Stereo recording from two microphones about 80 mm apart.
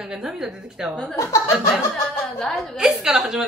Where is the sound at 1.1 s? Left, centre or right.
Left.